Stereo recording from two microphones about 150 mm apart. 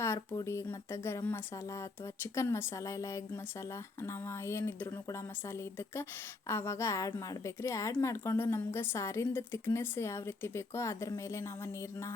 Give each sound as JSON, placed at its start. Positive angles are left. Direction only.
{"t": 0.0, "sound": "a woman's voice", "side_deg": 20}
{"t": 6.5, "sound": "a woman's voice", "side_deg": 15}